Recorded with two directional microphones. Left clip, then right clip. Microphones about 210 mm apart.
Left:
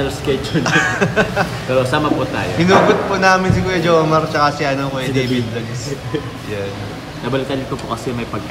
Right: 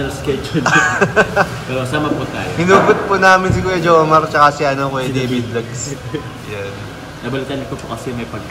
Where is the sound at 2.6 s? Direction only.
5° left (ahead or behind).